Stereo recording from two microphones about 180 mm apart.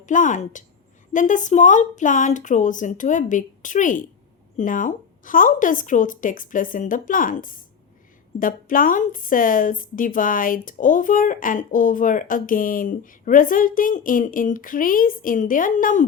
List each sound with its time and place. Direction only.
0.0 s speech: 45° left (ahead or behind)